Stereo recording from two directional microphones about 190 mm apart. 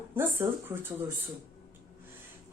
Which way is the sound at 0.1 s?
10° right (ahead or behind).